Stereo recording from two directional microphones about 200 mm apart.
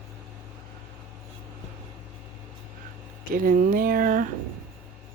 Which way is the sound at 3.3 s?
45° right (ahead or behind).